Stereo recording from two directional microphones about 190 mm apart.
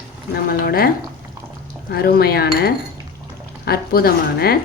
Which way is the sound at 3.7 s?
55° left (ahead or behind).